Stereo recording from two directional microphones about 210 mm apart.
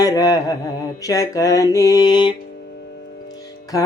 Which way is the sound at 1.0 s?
15° left (ahead or behind).